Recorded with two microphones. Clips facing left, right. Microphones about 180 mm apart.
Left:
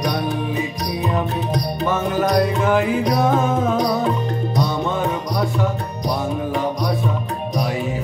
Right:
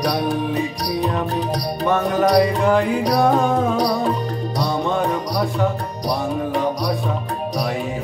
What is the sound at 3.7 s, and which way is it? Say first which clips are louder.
Music: even; 35° right (ahead or behind).